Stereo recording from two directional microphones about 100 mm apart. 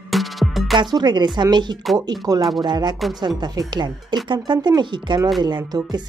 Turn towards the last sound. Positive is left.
turn(degrees=-40)  # may be behind; listen again after turning